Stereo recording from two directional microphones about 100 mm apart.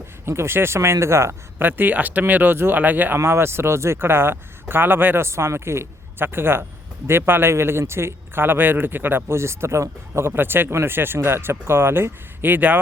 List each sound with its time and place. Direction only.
0.3 s speech: 25° right (ahead or behind)